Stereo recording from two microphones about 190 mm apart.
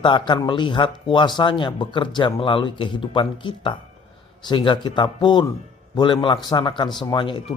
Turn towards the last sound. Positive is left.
turn(degrees=25)  # may be behind; listen again after turning